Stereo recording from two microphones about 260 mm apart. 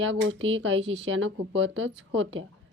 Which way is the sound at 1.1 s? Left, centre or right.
Right.